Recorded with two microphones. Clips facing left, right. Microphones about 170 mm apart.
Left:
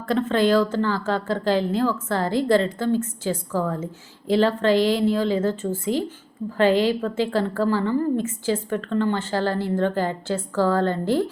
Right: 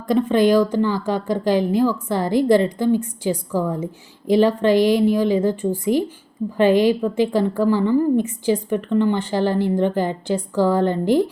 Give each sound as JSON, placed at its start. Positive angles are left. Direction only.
{"t": 0.1, "sound": "a woman's voice", "side_deg": -15}